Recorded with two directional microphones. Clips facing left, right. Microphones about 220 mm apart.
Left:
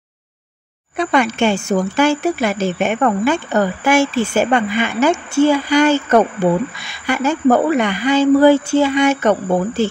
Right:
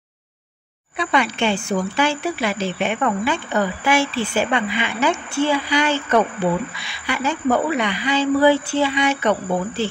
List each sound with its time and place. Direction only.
0.9 s speech: 45° left (ahead or behind)